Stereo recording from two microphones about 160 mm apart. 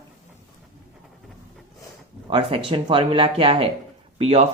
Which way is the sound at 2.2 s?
35° right (ahead or behind).